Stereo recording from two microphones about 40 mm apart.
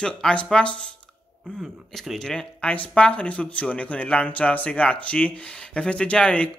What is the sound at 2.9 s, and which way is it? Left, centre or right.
Speech, left.